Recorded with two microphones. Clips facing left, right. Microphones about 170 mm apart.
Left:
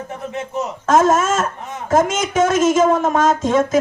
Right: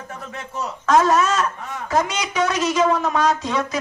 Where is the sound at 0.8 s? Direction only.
45° left (ahead or behind).